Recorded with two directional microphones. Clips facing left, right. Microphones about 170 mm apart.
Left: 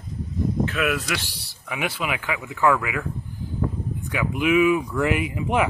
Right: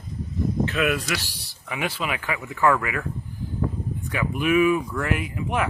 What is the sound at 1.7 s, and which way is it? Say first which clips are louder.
Speech: left 1 dB; 15° left (ahead or behind).